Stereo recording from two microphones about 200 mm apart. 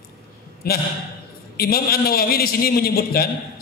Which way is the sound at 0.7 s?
50° left (ahead or behind).